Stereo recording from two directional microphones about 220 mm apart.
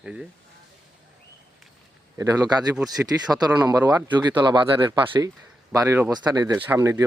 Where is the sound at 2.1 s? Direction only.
15° right (ahead or behind).